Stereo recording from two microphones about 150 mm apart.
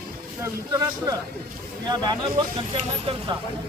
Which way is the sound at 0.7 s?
25° right (ahead or behind).